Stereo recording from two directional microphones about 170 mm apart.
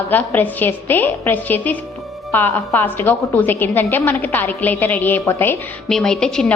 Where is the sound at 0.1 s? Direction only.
10° left (ahead or behind).